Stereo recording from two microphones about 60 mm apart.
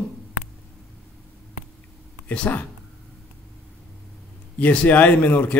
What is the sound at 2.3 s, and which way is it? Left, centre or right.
Speech, left.